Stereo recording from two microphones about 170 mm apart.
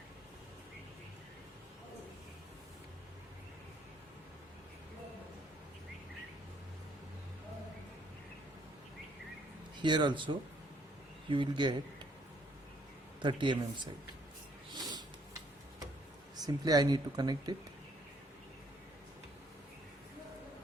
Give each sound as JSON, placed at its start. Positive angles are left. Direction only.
{"t": 9.7, "sound": "speech", "side_deg": -25}
{"t": 13.2, "sound": "speech", "side_deg": -30}
{"t": 16.4, "sound": "speech", "side_deg": -20}